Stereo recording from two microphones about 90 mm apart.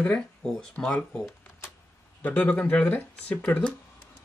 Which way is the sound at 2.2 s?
20° left (ahead or behind).